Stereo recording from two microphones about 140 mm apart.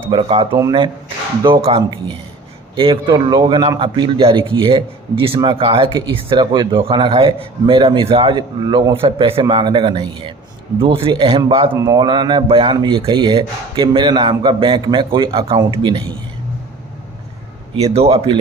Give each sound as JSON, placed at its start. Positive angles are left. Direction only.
{"t": 0.1, "sound": "speech", "side_deg": -40}
{"t": 1.5, "sound": "speech", "side_deg": -40}
{"t": 11.7, "sound": "speech", "side_deg": -25}
{"t": 17.7, "sound": "speech", "side_deg": -45}